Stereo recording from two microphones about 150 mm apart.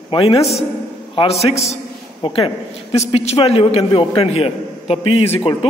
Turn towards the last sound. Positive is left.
turn(degrees=40)  # may be behind; listen again after turning